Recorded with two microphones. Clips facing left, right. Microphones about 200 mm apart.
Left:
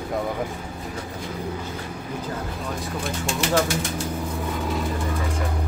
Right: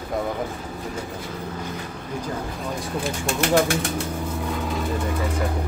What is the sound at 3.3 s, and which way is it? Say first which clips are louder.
Speech: right 3 dB; 60° right (ahead or behind).